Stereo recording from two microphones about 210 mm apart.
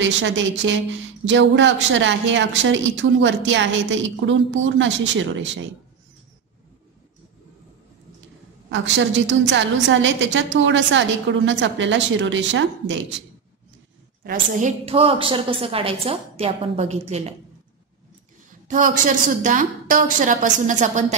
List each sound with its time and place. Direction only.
0.0 s a woman's voice: 60° right (ahead or behind)
8.6 s a woman's voice: 60° right (ahead or behind)
14.2 s a woman's voice: 40° right (ahead or behind)
14.9 s a woman's voice: 25° right (ahead or behind)
18.5 s a woman's voice: 40° right (ahead or behind)